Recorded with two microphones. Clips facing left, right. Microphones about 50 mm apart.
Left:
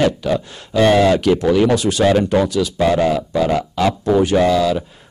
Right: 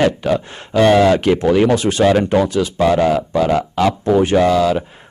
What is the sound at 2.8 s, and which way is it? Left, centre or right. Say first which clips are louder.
A man's voice: right 2 dB; centre.